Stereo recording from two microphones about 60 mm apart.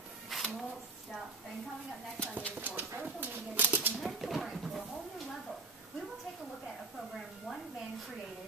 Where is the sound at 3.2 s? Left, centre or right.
Right.